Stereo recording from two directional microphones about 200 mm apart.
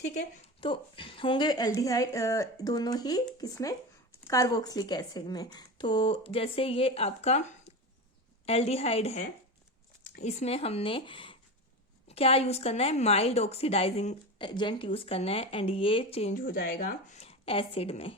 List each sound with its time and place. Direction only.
0.4 s a woman's voice: 25° left (ahead or behind); by 17.2 s 45° left (ahead or behind)
17.2 s a woman's voice: 30° left (ahead or behind)